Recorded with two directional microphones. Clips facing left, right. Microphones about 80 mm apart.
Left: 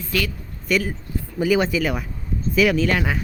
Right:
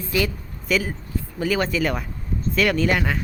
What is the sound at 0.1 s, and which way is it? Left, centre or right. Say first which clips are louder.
Speech: right 2 dB; centre.